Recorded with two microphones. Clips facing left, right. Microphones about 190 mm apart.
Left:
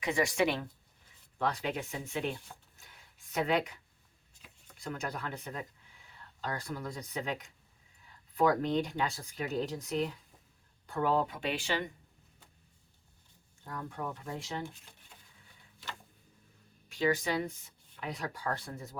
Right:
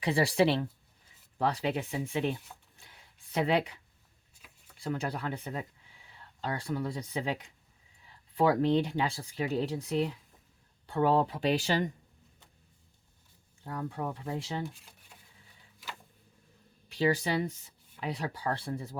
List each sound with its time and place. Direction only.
0.0 s speech: 35° right (ahead or behind)
2.7 s a sound: 30° right (ahead or behind)
4.8 s speech: 30° right (ahead or behind)
13.7 s speech: 30° right (ahead or behind)
16.9 s speech: 35° right (ahead or behind)